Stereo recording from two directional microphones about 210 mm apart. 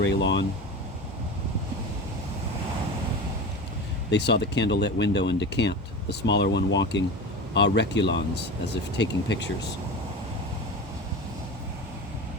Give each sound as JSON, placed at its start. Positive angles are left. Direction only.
{"t": 0.0, "sound": "speech", "side_deg": 55}
{"t": 4.1, "sound": "speech", "side_deg": 55}